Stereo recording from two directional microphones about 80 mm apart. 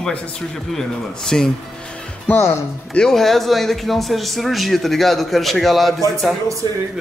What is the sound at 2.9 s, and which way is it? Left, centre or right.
Speech, centre.